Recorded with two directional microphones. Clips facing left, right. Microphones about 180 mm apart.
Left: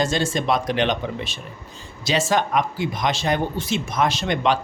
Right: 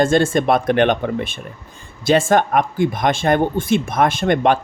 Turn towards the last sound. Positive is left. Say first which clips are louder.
# right 5 dB
turn(degrees=-50)  # may be behind; listen again after turning